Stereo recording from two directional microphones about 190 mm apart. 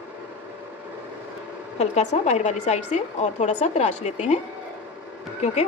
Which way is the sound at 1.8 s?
35° left (ahead or behind).